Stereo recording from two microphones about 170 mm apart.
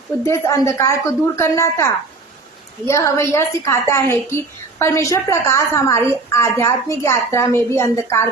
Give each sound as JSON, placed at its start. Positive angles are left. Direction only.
{"t": 0.2, "sound": "a woman's voice", "side_deg": 15}